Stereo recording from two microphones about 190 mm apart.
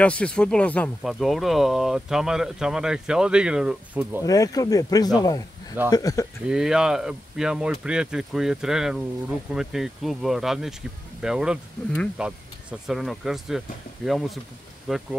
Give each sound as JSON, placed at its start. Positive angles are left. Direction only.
{"t": 0.0, "sound": "speech", "side_deg": 5}
{"t": 4.2, "sound": "speech", "side_deg": 20}
{"t": 6.4, "sound": "speech", "side_deg": -5}